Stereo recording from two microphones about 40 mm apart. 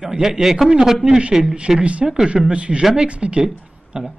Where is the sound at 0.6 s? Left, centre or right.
Right.